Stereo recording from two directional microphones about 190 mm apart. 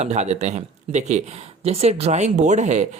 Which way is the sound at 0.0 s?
35° right (ahead or behind).